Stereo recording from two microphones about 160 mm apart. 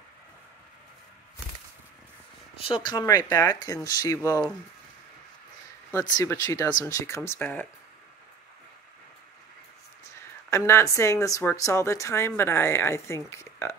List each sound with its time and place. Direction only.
2.6 s speech: 30° left (ahead or behind)
5.9 s speech: 25° left (ahead or behind)
10.5 s speech: 20° left (ahead or behind)